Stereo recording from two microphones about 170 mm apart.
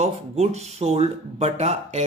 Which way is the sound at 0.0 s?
40° right (ahead or behind).